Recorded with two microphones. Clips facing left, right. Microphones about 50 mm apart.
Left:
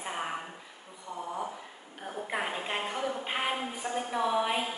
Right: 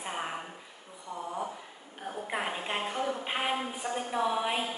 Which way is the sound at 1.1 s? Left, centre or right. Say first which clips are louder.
Even; centre.